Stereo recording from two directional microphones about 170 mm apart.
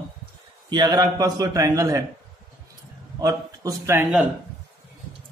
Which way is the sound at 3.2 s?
20° right (ahead or behind).